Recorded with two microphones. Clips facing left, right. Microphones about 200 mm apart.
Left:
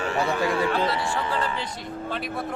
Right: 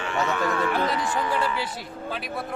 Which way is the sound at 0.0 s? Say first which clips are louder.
Left 2 dB; 35° left (ahead or behind).